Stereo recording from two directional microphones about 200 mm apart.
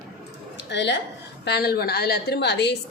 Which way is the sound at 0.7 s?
60° left (ahead or behind).